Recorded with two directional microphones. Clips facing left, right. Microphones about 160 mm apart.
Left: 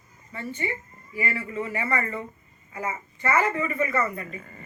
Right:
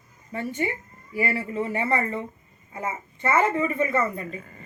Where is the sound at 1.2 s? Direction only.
35° right (ahead or behind).